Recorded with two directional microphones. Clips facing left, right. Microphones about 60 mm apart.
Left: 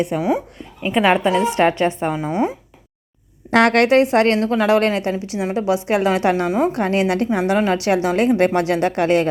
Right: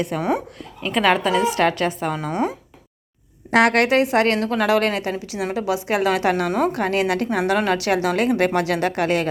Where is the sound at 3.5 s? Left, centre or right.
Left.